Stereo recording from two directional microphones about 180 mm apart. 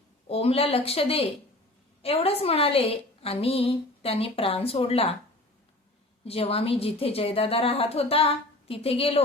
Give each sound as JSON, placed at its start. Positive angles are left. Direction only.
{"t": 0.3, "sound": "a woman's voice", "side_deg": 35}
{"t": 6.2, "sound": "a woman's voice", "side_deg": 35}